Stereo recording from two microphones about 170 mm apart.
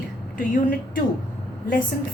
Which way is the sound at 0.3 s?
55° left (ahead or behind).